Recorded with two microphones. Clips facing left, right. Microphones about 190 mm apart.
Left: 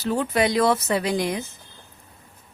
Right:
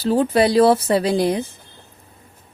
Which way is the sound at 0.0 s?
30° right (ahead or behind).